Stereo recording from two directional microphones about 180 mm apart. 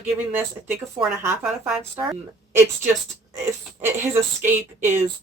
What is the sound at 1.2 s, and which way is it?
Speech, 10° right (ahead or behind).